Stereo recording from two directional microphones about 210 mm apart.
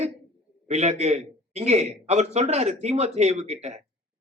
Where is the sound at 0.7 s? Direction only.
30° right (ahead or behind).